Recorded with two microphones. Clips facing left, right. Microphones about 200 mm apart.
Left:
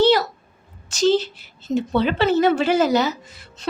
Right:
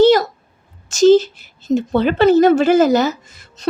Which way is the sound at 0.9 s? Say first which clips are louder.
Right 8 dB; 45° right (ahead or behind).